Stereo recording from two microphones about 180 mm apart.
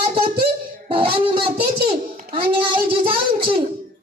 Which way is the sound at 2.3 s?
30° right (ahead or behind).